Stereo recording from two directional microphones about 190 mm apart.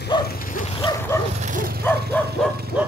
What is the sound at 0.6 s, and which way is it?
Bow-wow, 25° left (ahead or behind).